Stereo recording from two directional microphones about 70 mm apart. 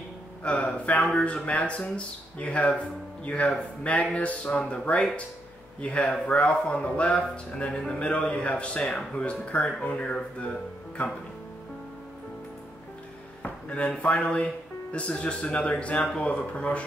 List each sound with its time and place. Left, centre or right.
0.4 s a man's voice: centre
13.4 s a man's voice: centre